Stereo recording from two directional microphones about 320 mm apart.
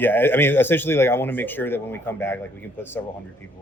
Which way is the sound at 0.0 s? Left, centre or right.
Centre.